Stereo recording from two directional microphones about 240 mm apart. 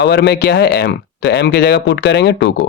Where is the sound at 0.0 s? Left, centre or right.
Left.